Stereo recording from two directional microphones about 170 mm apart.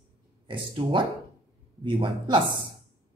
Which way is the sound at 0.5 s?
30° right (ahead or behind).